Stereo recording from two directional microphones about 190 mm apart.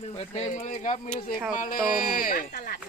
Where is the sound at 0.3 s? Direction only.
40° left (ahead or behind).